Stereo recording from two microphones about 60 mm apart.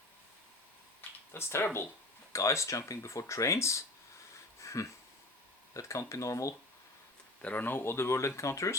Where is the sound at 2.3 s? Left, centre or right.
Left.